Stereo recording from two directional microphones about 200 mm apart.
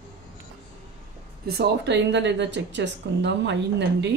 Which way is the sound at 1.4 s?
55° right (ahead or behind).